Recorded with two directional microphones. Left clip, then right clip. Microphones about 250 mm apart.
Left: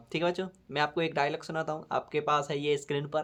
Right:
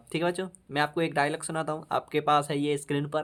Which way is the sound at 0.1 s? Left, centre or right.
Right.